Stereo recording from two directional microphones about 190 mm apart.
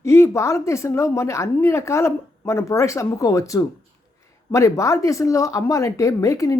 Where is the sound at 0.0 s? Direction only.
15° left (ahead or behind).